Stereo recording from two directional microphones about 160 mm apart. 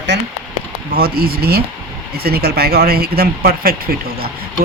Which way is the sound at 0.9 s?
70° right (ahead or behind).